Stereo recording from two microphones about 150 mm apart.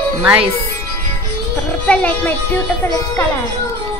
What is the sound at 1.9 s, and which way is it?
Speech, 10° left (ahead or behind).